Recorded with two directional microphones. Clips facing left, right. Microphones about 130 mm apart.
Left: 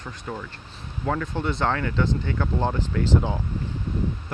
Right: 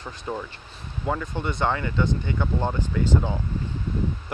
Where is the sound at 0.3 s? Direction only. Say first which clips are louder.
Right 3 dB; 15° right (ahead or behind).